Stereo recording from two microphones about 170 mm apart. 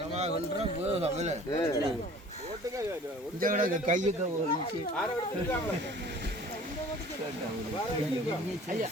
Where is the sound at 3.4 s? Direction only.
55° right (ahead or behind).